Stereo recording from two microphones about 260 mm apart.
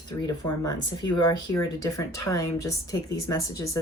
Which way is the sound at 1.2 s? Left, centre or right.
Centre.